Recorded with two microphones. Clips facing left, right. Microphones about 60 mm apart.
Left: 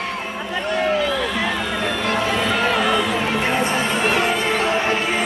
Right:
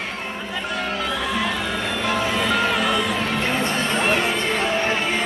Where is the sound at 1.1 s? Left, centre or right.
Centre.